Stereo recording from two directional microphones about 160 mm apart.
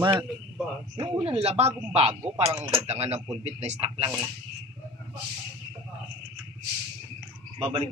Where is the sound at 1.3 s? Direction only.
40° right (ahead or behind).